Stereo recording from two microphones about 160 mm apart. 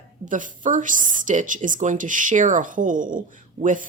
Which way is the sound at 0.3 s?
55° right (ahead or behind).